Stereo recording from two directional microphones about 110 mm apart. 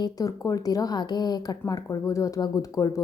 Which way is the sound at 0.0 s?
30° left (ahead or behind).